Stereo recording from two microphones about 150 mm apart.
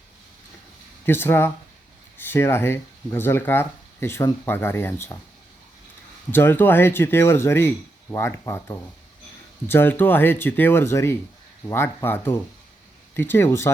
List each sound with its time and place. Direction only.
1.0 s speech: 15° left (ahead or behind)
6.3 s speech: 15° left (ahead or behind)